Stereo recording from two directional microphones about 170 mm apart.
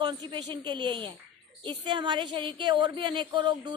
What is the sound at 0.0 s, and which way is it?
A woman's voice, 25° right (ahead or behind).